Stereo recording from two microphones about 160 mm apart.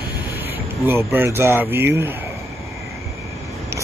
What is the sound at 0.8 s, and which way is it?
Speech, 15° right (ahead or behind).